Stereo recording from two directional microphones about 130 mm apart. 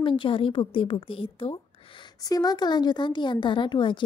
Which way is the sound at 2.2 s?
30° left (ahead or behind).